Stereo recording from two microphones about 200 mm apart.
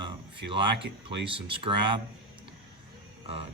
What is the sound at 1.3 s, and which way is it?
Speech, 25° right (ahead or behind).